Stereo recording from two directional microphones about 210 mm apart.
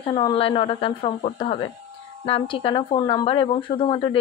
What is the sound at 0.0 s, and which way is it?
A woman's voice, 20° left (ahead or behind).